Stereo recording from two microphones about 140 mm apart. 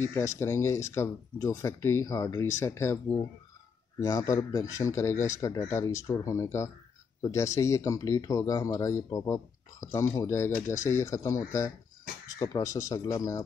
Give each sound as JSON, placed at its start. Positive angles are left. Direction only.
{"t": 0.0, "sound": "speech", "side_deg": 20}
{"t": 4.0, "sound": "speech", "side_deg": 25}